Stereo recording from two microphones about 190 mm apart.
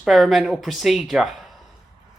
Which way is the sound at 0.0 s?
Centre (ahead or behind).